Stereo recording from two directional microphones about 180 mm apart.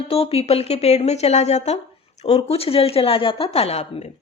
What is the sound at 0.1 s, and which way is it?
Speech, 35° left (ahead or behind).